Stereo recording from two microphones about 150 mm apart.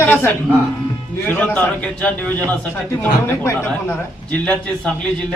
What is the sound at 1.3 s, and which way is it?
A man's voice, 10° left (ahead or behind).